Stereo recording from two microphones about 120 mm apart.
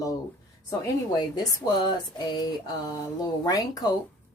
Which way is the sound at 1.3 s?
35° left (ahead or behind).